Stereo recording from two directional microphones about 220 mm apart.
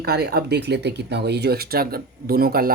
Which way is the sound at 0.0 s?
45° right (ahead or behind).